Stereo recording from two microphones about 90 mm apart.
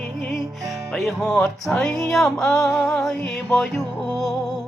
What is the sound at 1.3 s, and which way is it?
Music, 20° left (ahead or behind).